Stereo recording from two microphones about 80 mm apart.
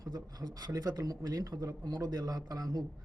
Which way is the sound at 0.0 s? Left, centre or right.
Right.